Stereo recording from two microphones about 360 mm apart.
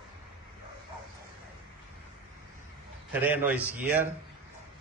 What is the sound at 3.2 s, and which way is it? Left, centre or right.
Speech, centre.